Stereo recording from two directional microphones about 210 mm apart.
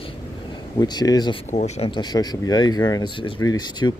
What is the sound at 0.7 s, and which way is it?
Speech, 20° left (ahead or behind).